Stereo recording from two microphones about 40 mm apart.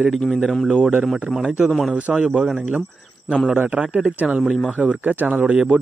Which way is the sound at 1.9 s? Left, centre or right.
Right.